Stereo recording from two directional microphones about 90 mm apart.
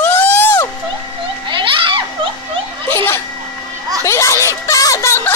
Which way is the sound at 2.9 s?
30° left (ahead or behind).